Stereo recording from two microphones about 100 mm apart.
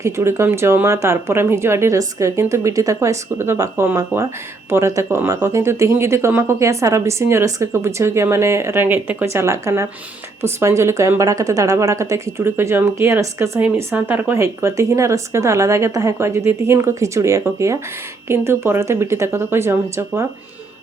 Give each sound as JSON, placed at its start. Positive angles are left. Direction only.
{"t": 0.0, "sound": "speech", "side_deg": -30}